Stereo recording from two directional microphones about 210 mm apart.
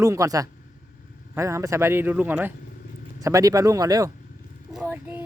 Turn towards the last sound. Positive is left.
turn(degrees=-10)  # may be behind; listen again after turning